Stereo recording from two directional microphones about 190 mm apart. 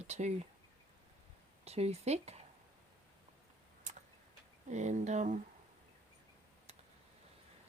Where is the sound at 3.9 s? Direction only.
40° right (ahead or behind).